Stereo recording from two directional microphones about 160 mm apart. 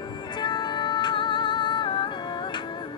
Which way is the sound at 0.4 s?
30° left (ahead or behind).